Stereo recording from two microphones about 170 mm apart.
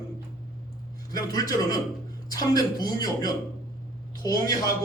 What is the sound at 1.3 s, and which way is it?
A man's voice, 20° left (ahead or behind).